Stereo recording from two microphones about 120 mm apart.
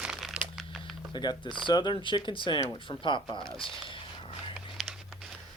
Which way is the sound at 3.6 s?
45° left (ahead or behind).